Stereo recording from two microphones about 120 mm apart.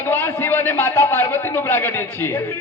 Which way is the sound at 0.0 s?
15° left (ahead or behind).